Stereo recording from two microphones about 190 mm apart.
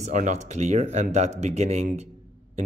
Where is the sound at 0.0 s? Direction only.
40° right (ahead or behind).